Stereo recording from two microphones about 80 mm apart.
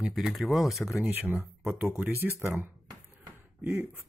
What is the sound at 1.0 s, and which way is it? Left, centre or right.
Speech, right.